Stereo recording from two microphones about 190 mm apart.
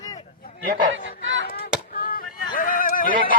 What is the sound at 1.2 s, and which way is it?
Chop, 85° right.